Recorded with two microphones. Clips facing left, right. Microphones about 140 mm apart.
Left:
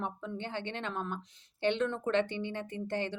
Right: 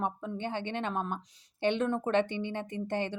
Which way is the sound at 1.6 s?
15° right (ahead or behind).